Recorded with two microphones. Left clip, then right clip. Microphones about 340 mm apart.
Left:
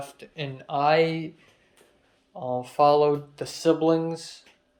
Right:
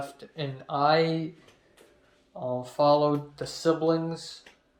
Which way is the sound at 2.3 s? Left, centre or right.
Centre.